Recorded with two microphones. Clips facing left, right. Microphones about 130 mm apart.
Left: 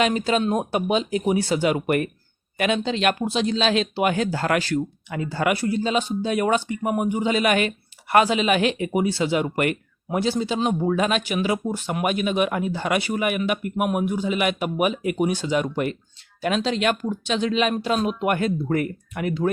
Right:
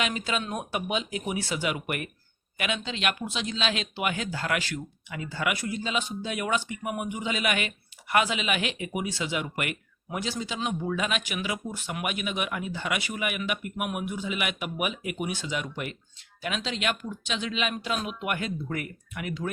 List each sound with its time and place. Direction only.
0.0 s speech: 40° left (ahead or behind)